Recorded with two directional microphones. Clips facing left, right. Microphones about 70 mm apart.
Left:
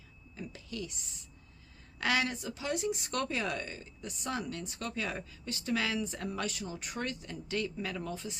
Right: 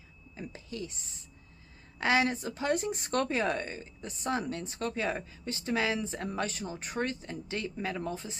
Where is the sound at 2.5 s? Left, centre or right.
Right.